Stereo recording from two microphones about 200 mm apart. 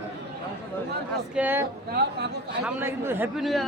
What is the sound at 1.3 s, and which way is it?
Speech, 10° right (ahead or behind).